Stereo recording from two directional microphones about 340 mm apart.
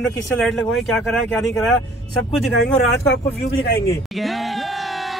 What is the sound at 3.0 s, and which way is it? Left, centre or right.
Speech, left.